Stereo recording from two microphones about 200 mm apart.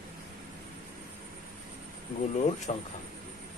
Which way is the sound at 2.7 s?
30° left (ahead or behind).